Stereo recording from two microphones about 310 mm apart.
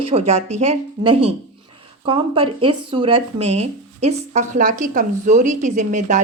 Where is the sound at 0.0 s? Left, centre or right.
Centre.